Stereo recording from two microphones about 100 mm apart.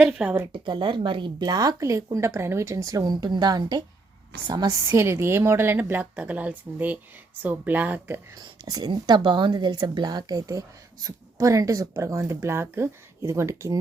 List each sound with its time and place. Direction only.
0.0 s speech: 10° right (ahead or behind)
0.5 s speech: 50° right (ahead or behind)
1.4 s a woman's voice: 40° right (ahead or behind)
4.9 s a woman's voice: 25° right (ahead or behind)
8.4 s speech: 40° right (ahead or behind)
8.9 s speech: 50° right (ahead or behind); by 13.7 s 30° right (ahead or behind)